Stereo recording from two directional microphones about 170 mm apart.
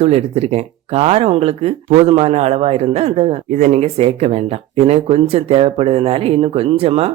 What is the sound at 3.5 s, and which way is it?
Speech, 50° right (ahead or behind).